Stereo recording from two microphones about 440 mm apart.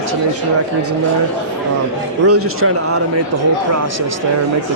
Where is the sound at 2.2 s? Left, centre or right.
Right.